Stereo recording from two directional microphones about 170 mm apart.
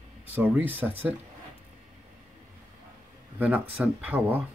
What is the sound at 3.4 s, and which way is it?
Speech, 10° right (ahead or behind).